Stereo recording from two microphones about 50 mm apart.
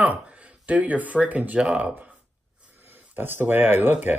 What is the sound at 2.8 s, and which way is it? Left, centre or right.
Speech, right.